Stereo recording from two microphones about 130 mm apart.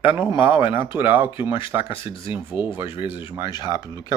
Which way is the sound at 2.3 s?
15° right (ahead or behind).